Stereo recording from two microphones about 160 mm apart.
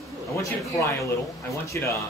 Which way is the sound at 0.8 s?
20° left (ahead or behind).